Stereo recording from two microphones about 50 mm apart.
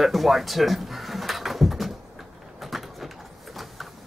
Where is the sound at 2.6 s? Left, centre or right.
Centre.